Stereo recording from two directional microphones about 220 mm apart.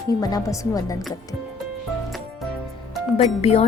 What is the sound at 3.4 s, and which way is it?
Speech, 25° left (ahead or behind).